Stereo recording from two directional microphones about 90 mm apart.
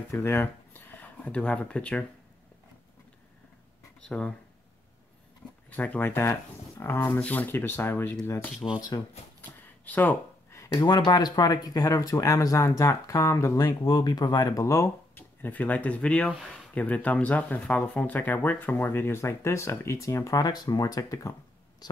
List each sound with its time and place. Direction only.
0.1 s speech: 25° left (ahead or behind)
5.7 s speech: 15° left (ahead or behind)
8.7 s speech: 45° left (ahead or behind)
9.8 s speech: 20° left (ahead or behind)
10.8 s speech: 50° left (ahead or behind)
13.6 s speech: 50° left (ahead or behind)
15.1 s speech: 20° left (ahead or behind); by 20.4 s 35° left (ahead or behind)
20.4 s speech: 45° left (ahead or behind)